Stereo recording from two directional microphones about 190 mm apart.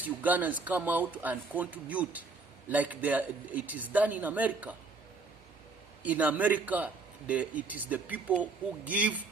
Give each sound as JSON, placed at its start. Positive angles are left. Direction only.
{"t": 0.0, "sound": "a man's voice", "side_deg": -10}
{"t": 6.0, "sound": "a man's voice", "side_deg": -10}